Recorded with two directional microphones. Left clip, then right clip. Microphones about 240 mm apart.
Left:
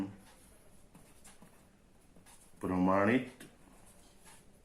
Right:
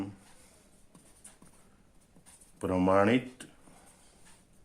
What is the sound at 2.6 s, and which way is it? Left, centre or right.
Speech, right.